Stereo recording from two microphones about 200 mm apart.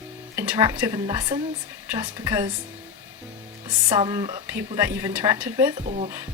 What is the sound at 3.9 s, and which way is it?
Speech, 20° right (ahead or behind).